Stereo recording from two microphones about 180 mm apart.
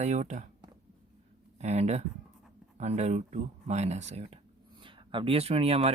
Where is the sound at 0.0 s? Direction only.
40° right (ahead or behind).